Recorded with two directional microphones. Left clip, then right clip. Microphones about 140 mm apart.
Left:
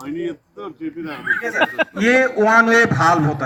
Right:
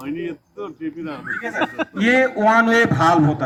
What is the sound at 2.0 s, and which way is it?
A man's voice, 25° right (ahead or behind).